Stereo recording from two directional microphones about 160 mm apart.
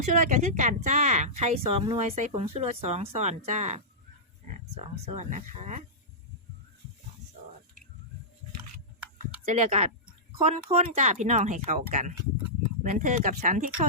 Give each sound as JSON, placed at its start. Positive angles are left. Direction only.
{"t": 0.0, "sound": "speech", "side_deg": -50}
{"t": 9.5, "sound": "speech", "side_deg": -50}